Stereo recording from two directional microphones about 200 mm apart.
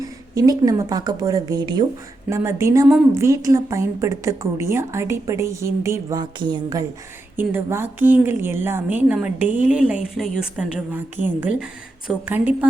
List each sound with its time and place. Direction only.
0.0 s a woman's voice: 20° right (ahead or behind)